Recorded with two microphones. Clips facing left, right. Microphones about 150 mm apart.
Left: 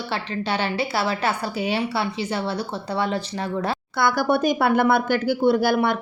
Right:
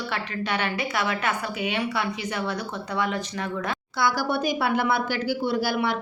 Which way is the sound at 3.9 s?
55° left (ahead or behind).